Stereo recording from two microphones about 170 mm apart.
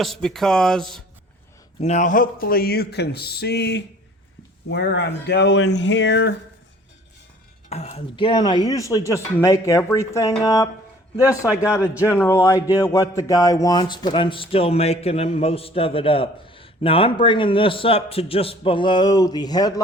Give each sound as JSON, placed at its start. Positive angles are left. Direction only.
{"t": 0.0, "sound": "speech", "side_deg": 0}
{"t": 1.8, "sound": "speech", "side_deg": 45}
{"t": 7.7, "sound": "speech", "side_deg": 40}
{"t": 11.9, "sound": "a man's voice", "side_deg": 15}